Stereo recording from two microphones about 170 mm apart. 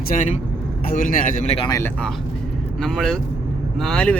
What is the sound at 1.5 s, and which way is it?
Speech, 25° left (ahead or behind).